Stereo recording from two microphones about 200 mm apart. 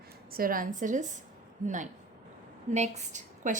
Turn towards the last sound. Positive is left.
turn(degrees=-40)  # may be behind; listen again after turning